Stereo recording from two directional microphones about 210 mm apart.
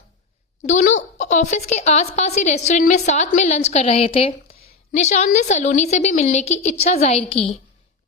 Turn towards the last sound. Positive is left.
turn(degrees=30)  # may be behind; listen again after turning